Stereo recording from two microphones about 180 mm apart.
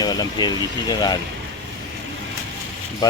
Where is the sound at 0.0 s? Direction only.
20° left (ahead or behind).